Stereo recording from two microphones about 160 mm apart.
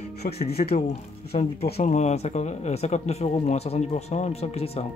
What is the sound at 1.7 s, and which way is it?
Speech, 45° left (ahead or behind).